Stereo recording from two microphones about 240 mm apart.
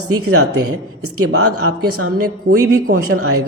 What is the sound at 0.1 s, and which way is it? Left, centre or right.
A man's voice, right.